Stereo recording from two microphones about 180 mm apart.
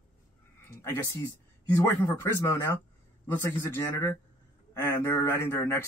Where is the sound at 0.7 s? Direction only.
15° left (ahead or behind).